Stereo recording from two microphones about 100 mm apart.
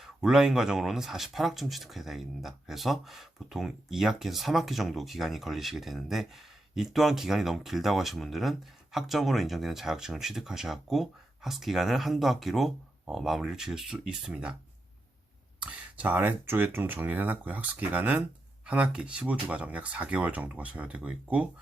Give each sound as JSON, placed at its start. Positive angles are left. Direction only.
{"t": 0.0, "sound": "speech", "side_deg": -5}
{"t": 15.6, "sound": "speech", "side_deg": -15}